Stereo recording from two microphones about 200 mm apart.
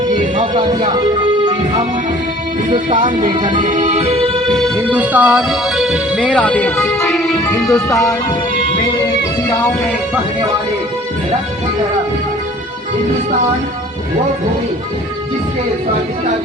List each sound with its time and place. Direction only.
2.6 s speech: 40° right (ahead or behind)
3.7 s music: 40° right (ahead or behind)
4.9 s speech: 5° right (ahead or behind)
7.4 s music: 15° left (ahead or behind)